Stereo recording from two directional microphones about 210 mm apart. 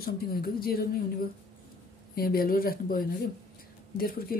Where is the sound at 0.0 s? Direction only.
45° left (ahead or behind).